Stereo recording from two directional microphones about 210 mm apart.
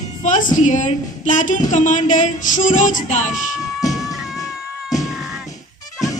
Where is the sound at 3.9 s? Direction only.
Centre (ahead or behind).